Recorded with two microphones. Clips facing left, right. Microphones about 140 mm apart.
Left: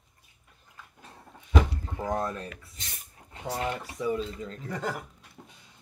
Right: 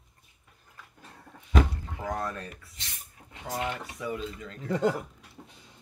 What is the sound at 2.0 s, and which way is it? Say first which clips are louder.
Speech: left 3 dB; 30° left (ahead or behind).